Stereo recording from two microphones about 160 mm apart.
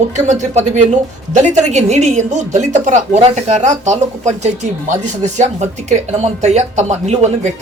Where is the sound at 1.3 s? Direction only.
45° right (ahead or behind).